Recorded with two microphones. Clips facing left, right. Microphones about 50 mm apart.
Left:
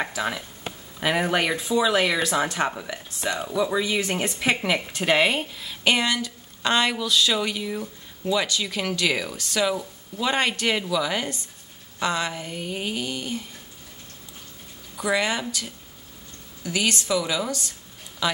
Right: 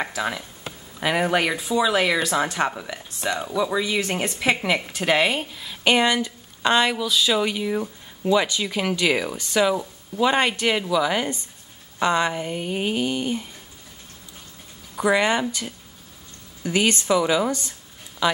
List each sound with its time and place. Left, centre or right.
0.0 s speech: centre
15.0 s speech: centre
16.6 s speech: right
18.2 s speech: centre